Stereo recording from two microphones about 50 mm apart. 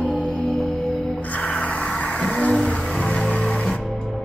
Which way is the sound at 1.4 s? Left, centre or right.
Left.